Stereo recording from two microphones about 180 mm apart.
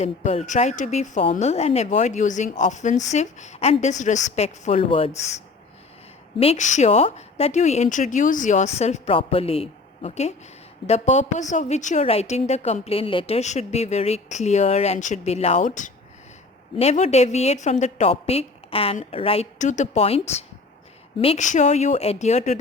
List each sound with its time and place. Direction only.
0.0 s a woman's voice: 40° left (ahead or behind)
6.4 s a woman's voice: 40° left (ahead or behind)